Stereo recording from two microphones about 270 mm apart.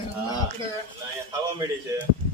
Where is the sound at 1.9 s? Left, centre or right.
Centre.